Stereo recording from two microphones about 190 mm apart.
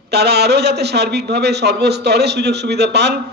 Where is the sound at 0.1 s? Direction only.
60° right (ahead or behind).